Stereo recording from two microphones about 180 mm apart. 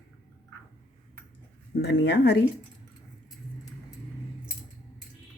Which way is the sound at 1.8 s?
70° left (ahead or behind).